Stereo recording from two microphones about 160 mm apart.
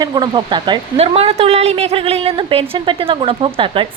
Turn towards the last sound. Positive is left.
turn(degrees=-35)  # may be behind; listen again after turning